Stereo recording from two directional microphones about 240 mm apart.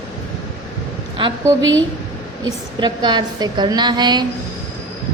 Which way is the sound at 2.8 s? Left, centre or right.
Centre.